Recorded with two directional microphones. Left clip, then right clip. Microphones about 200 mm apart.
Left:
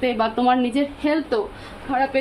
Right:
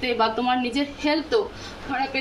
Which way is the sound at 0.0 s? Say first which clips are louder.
Left 2 dB; 45° left (ahead or behind).